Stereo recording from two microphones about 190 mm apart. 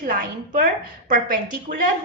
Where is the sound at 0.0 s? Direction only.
45° right (ahead or behind).